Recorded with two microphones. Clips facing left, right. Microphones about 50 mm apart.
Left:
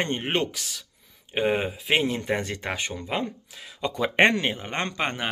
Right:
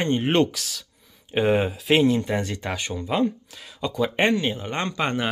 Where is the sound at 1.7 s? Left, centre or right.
Centre.